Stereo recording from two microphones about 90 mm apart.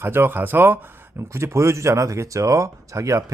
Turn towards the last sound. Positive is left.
turn(degrees=-35)  # may be behind; listen again after turning